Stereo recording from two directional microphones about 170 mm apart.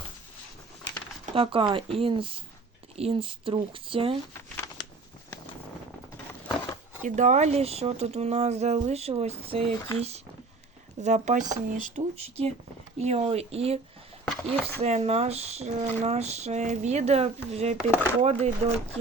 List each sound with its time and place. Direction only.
1.2 s speech: 30° right (ahead or behind)
7.2 s speech: 45° right (ahead or behind)
14.3 s speech: 10° left (ahead or behind)
14.8 s speech: 40° right (ahead or behind)